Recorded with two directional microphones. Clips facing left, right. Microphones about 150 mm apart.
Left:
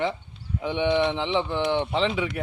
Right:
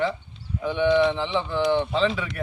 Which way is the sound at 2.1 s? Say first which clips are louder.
Left 3 dB; 5° left (ahead or behind).